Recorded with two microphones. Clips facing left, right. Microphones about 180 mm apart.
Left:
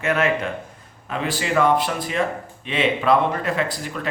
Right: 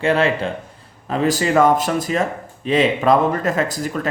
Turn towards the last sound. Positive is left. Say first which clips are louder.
# right 4 dB
turn(degrees=-45)  # may be behind; listen again after turning